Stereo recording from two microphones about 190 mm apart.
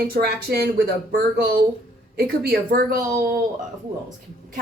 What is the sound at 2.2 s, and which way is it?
Speech, 60° right (ahead or behind).